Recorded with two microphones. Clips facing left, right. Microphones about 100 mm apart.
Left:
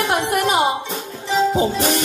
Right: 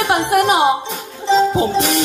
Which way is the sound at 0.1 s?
55° right (ahead or behind).